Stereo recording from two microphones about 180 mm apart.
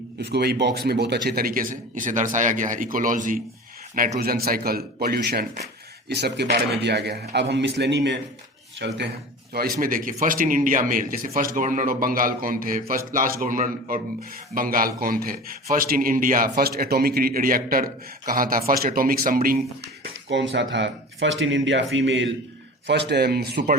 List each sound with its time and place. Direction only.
0.3 s a man's voice: 65° right (ahead or behind); by 3.4 s 45° right (ahead or behind)
4.2 s a man's voice: 55° right (ahead or behind)
9.8 s a man's voice: 50° right (ahead or behind)
20.3 s speech: 85° right
22.9 s a man's voice: 70° right (ahead or behind)